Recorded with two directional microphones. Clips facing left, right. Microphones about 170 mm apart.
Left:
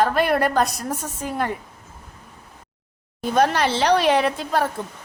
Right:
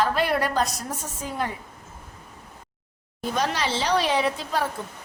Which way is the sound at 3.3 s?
55° left (ahead or behind).